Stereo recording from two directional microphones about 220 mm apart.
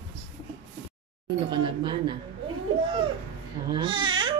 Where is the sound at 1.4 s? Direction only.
20° right (ahead or behind).